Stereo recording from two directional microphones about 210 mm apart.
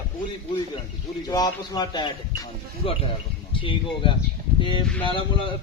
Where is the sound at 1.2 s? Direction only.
20° left (ahead or behind).